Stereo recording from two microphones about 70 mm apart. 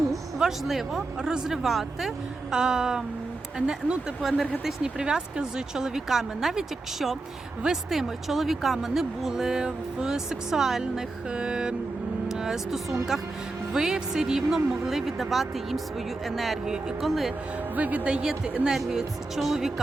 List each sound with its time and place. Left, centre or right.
0.1 s speech: centre
4.2 s speech: centre
17.7 s speech: right; by 19.7 s centre